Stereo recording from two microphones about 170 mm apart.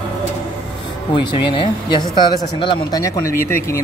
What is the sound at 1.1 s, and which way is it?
Speech, 30° left (ahead or behind).